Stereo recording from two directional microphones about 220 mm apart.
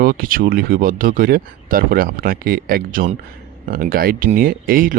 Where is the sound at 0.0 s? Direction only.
40° right (ahead or behind).